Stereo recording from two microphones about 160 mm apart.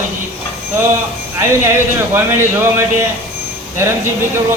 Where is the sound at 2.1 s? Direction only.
15° right (ahead or behind).